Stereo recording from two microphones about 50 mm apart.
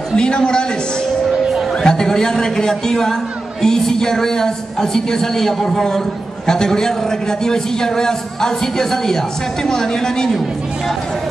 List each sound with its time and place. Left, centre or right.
0.1 s a man's voice: centre
1.3 s music: centre
1.8 s a man's voice: centre